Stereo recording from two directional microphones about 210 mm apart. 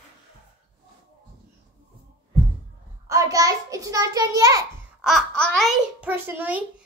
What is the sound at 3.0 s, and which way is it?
A child's voice, 15° right (ahead or behind).